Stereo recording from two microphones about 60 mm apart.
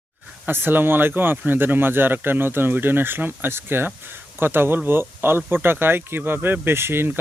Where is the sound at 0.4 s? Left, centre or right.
Right.